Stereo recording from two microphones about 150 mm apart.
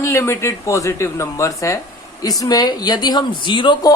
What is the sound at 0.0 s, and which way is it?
A woman's voice, 20° left (ahead or behind).